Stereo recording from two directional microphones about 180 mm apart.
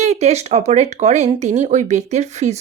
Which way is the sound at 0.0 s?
40° right (ahead or behind).